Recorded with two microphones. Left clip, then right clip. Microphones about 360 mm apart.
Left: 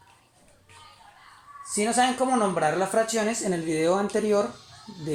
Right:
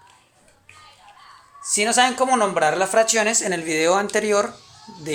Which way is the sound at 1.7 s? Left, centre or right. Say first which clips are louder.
Right 5 dB; right.